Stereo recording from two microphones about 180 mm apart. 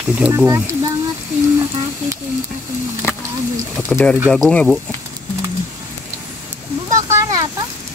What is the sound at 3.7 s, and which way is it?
Speech, 5° left (ahead or behind).